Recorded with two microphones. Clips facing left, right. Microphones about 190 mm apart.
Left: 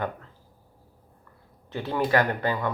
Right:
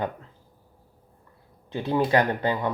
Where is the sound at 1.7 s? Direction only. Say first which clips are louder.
Right 2 dB; 15° right (ahead or behind).